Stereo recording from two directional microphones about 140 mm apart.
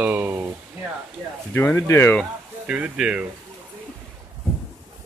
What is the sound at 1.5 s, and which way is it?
Speech, 15° left (ahead or behind).